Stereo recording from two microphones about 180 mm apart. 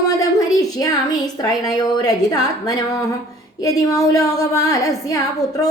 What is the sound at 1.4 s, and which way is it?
A woman's voice, 20° left (ahead or behind).